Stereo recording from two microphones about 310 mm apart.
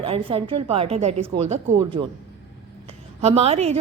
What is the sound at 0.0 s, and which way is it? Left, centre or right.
A woman's voice, centre.